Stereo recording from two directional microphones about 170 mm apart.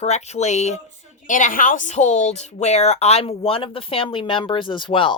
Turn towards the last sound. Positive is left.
turn(degrees=30)  # may be behind; listen again after turning